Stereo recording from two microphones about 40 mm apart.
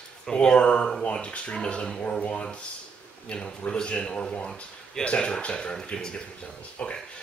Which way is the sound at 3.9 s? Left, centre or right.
Left.